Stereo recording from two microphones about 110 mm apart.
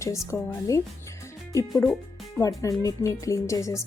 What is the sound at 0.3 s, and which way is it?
Speech, 20° left (ahead or behind).